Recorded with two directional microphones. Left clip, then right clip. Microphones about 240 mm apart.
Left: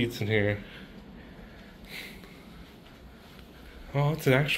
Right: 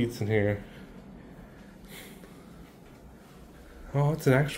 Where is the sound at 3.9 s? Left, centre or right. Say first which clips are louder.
Even; centre.